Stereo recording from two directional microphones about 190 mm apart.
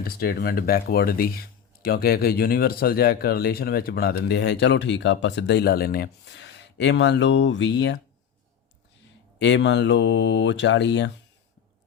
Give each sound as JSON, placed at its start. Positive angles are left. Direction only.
{"t": 0.0, "sound": "speech", "side_deg": 55}
{"t": 9.4, "sound": "speech", "side_deg": 70}